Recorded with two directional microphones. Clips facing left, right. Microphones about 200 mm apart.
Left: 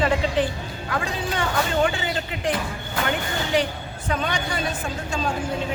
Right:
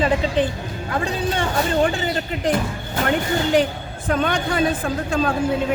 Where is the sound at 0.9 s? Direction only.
30° right (ahead or behind).